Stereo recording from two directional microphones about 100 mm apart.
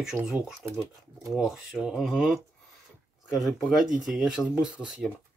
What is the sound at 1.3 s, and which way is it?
Speech, 5° right (ahead or behind).